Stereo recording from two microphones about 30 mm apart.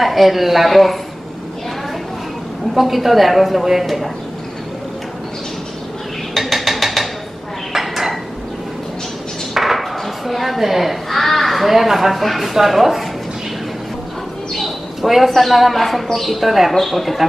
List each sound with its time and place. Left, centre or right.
0.0 s speech: centre
2.7 s speech: centre
6.3 s a sound: centre
7.7 s dishes: centre
9.5 s a sound: centre
10.6 s speech: centre
11.1 s speech: centre
15.0 s speech: centre